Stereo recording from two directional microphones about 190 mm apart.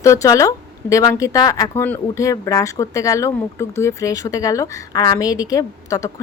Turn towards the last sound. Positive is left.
turn(degrees=15)  # may be behind; listen again after turning